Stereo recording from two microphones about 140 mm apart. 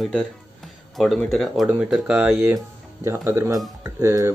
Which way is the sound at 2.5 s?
20° right (ahead or behind).